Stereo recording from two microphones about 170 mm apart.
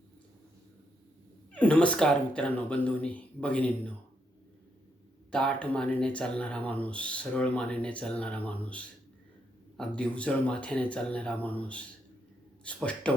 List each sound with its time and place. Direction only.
1.5 s speech: 5° left (ahead or behind)
5.3 s speech: 5° left (ahead or behind)